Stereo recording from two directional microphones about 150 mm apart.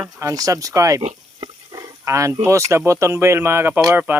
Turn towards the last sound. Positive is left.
turn(degrees=-15)  # may be behind; listen again after turning